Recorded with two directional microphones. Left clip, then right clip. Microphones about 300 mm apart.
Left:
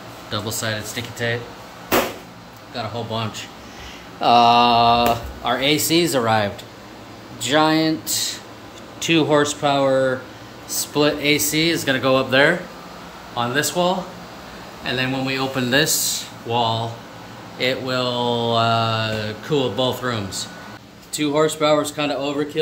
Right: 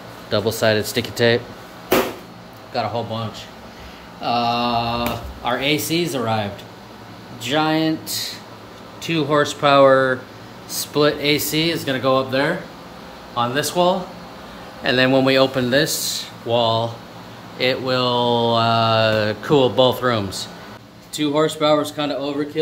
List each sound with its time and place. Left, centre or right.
0.3 s speech: centre
2.7 s speech: centre
4.2 s speech: centre